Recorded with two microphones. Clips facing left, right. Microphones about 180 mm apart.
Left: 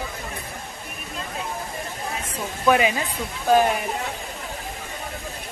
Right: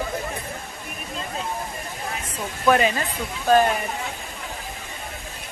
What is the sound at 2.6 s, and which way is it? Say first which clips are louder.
Speech: even; 5° left (ahead or behind).